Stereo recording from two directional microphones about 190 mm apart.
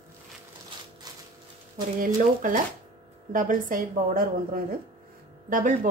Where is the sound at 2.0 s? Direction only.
45° right (ahead or behind).